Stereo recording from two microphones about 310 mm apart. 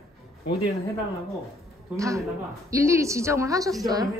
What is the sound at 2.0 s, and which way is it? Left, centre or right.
A woman's voice, centre.